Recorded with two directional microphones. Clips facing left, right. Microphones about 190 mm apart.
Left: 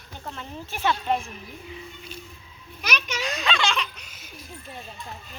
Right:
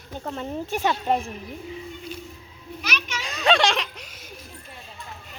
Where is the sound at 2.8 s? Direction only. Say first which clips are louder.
Left 2 dB; 40° left (ahead or behind).